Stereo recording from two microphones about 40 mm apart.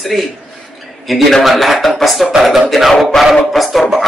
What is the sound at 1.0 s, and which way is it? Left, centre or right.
Speech, centre.